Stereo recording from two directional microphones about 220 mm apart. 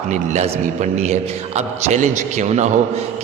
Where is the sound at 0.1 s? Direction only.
30° right (ahead or behind).